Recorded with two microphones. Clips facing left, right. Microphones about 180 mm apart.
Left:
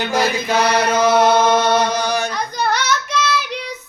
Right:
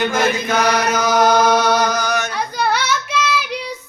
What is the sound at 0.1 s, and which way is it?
Chant, 35° left (ahead or behind).